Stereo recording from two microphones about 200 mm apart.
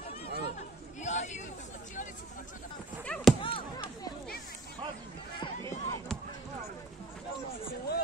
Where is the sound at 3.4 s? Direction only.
25° left (ahead or behind).